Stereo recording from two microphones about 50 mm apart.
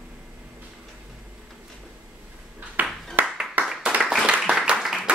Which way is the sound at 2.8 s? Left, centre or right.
Right.